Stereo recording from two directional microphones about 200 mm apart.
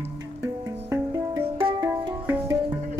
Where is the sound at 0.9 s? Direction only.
15° right (ahead or behind).